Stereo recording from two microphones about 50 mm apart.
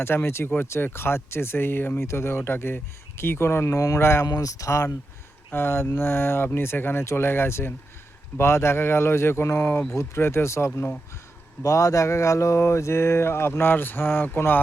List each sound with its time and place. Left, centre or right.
0.3 s speech: left
2.0 s speech: left
5.5 s speech: left
7.0 s speech: left
11.7 s speech: left